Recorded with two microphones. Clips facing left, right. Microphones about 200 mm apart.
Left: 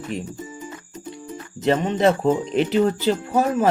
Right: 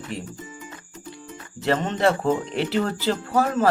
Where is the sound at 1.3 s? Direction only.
15° left (ahead or behind).